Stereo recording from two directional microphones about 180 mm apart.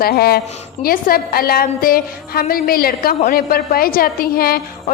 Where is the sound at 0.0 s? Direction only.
60° left (ahead or behind).